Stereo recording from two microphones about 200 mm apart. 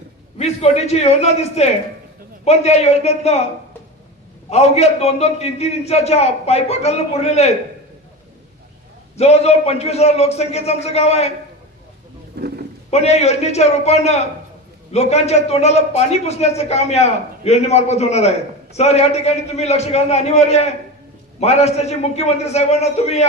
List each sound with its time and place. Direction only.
0.3 s a man's voice: 30° left (ahead or behind)
4.4 s a man's voice: 30° left (ahead or behind)
9.1 s a man's voice: 30° left (ahead or behind)
12.4 s speech: 55° right (ahead or behind)
12.9 s a man's voice: 30° left (ahead or behind)